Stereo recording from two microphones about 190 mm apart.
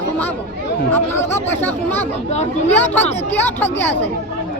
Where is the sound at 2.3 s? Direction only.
35° left (ahead or behind).